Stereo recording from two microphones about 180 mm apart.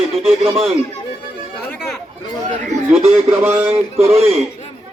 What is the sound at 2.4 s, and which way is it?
Chatter, 40° right (ahead or behind).